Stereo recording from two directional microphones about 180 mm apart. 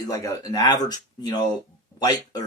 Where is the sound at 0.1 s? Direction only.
20° left (ahead or behind).